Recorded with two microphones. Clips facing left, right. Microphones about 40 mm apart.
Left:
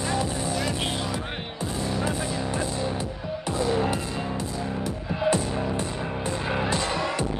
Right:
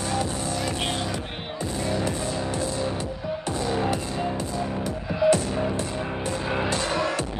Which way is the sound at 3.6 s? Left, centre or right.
Centre.